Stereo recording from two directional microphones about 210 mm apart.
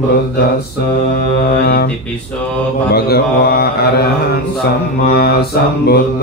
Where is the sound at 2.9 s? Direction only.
50° left (ahead or behind).